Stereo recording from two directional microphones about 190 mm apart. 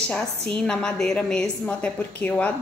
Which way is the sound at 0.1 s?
5° left (ahead or behind).